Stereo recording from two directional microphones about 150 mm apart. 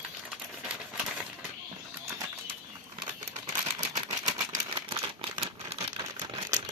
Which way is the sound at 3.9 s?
30° right (ahead or behind).